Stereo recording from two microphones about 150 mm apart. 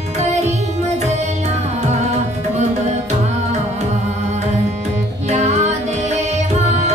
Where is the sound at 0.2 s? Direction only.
50° right (ahead or behind).